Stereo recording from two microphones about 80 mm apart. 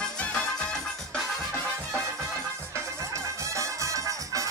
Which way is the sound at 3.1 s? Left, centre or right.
Right.